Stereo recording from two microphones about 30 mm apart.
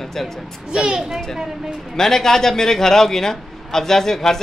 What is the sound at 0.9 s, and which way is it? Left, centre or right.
Speech, right.